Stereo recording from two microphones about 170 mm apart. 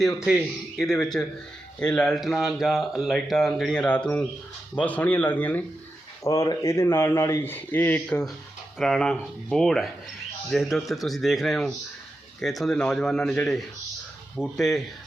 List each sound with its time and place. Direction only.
0.0 s speech: centre (ahead or behind)